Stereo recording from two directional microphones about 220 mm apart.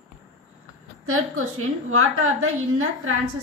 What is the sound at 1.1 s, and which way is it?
A woman's voice, 75° right (ahead or behind).